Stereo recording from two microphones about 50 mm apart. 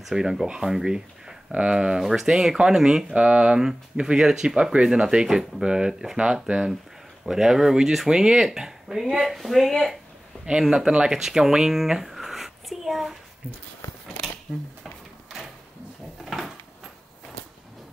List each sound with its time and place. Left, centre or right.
0.0 s speech: centre
3.2 s speech: right
7.2 s speech: centre
10.3 s a sound: centre
10.9 s speech: centre
16.3 s a sound: centre